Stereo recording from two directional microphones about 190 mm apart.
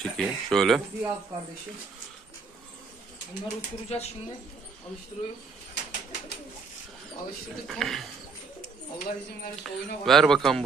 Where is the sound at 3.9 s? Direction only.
35° left (ahead or behind).